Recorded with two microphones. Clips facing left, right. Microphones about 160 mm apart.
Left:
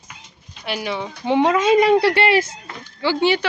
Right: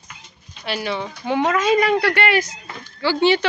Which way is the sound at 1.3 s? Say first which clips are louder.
Left 3 dB; 25° left (ahead or behind).